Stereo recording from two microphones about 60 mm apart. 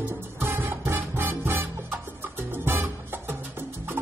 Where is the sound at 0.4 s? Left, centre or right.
Right.